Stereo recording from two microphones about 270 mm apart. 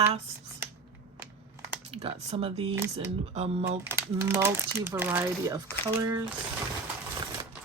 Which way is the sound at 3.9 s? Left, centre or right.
Centre.